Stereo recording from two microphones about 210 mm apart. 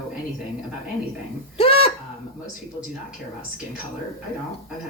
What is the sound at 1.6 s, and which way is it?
Goat, 25° left (ahead or behind).